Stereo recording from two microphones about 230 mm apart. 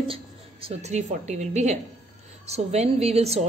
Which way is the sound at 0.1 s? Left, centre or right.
Right.